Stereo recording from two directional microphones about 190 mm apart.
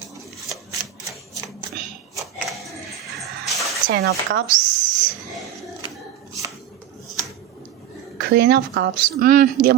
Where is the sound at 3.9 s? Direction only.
60° right (ahead or behind).